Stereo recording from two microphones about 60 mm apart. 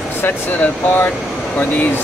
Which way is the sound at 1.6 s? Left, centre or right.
Left.